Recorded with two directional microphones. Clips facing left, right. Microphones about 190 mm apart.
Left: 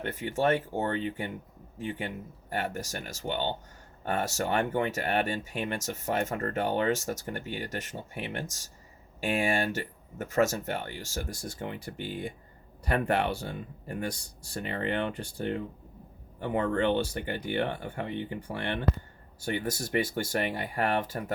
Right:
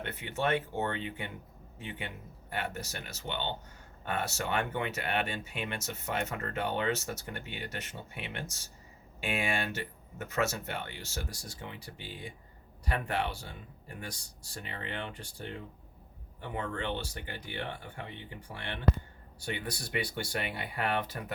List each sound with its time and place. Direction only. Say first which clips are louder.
0.0 s speech: left 5 dB; 45° left (ahead or behind)